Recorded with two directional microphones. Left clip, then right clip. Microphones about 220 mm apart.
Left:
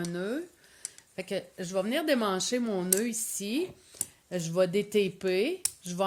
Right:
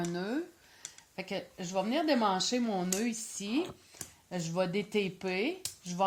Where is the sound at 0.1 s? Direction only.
40° left (ahead or behind).